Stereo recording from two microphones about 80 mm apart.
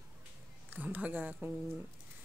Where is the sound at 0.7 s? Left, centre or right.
Right.